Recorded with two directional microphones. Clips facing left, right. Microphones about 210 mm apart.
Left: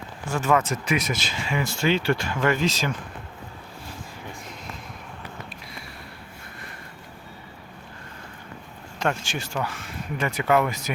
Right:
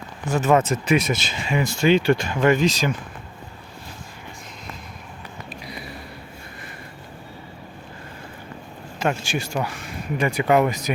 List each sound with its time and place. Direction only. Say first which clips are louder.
0.3 s speech: right 4 dB; 20° right (ahead or behind)
9.0 s speech: right 3 dB; 10° right (ahead or behind)